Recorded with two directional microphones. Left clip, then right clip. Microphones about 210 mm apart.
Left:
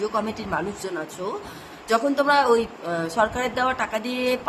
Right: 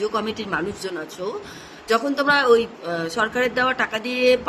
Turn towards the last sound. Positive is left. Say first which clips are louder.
# right 6 dB
turn(degrees=15)  # may be behind; listen again after turning